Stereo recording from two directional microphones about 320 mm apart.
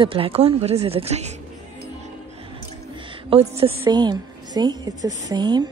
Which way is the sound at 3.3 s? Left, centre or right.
Centre.